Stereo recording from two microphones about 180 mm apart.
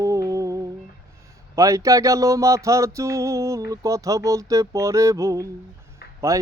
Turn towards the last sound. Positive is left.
turn(degrees=-15)  # may be behind; listen again after turning